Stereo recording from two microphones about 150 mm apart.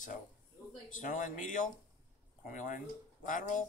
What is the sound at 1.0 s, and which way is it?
Speech, 60° left (ahead or behind).